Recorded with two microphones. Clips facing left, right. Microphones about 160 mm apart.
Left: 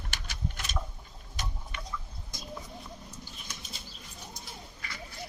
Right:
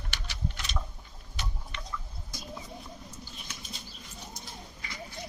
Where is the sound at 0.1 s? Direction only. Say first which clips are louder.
Right 1 dB; 45° left (ahead or behind).